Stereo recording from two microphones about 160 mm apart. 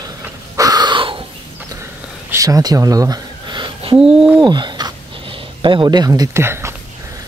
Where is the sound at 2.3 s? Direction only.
20° right (ahead or behind).